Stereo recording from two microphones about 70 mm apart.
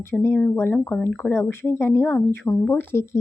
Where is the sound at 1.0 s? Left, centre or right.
Left.